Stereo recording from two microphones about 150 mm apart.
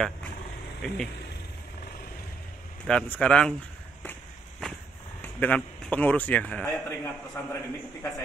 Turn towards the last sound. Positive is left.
turn(degrees=10)  # may be behind; listen again after turning